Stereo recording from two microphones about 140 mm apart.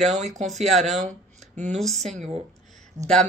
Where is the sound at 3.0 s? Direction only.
55° right (ahead or behind).